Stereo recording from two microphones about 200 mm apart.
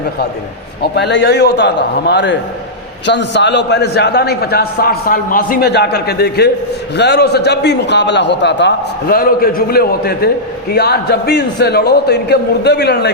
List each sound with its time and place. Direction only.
0.8 s a man's voice: 55° left (ahead or behind)